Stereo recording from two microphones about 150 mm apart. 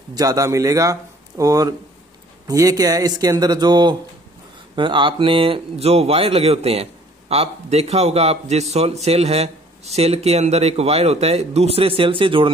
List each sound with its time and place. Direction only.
0.1 s speech: 25° right (ahead or behind)